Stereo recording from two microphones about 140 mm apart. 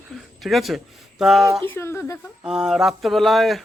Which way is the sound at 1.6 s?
15° left (ahead or behind).